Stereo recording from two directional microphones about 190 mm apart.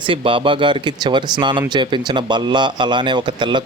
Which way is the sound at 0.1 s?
25° right (ahead or behind).